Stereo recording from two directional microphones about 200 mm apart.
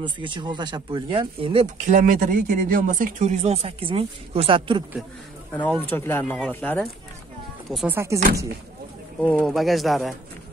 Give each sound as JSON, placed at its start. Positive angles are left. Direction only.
{"t": 0.2, "sound": "speech", "side_deg": -25}
{"t": 5.5, "sound": "speech", "side_deg": 10}
{"t": 7.7, "sound": "speech", "side_deg": -5}
{"t": 9.2, "sound": "speech", "side_deg": 5}